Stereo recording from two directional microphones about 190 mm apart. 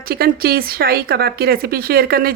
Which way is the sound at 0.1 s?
50° right (ahead or behind).